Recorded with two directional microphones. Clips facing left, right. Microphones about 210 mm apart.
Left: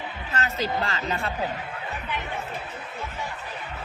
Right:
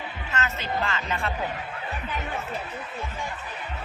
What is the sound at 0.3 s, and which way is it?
Speech, 35° left (ahead or behind).